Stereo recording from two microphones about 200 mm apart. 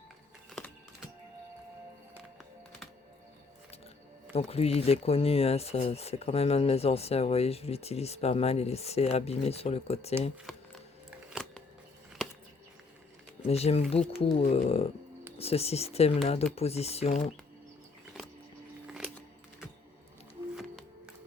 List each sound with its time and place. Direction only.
0.5 s typing: centre (ahead or behind)
4.4 s speech: 30° left (ahead or behind)
10.5 s a sound: centre (ahead or behind)
13.4 s speech: 30° left (ahead or behind)